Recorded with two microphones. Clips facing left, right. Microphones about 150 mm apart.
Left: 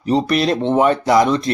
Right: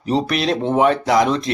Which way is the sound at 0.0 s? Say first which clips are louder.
Left 3 dB; centre (ahead or behind).